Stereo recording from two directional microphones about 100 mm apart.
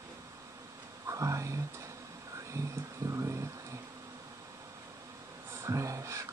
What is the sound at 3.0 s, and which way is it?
Vehicle, 30° right (ahead or behind).